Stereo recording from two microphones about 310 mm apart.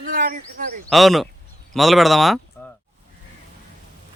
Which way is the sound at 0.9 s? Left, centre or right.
Centre.